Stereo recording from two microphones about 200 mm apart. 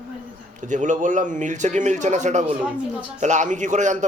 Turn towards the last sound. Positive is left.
turn(degrees=-35)  # may be behind; listen again after turning